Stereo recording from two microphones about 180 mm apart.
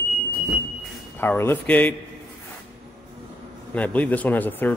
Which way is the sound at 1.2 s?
10° left (ahead or behind).